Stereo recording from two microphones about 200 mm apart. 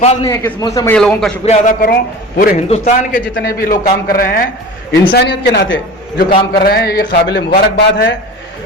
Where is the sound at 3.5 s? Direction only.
45° left (ahead or behind).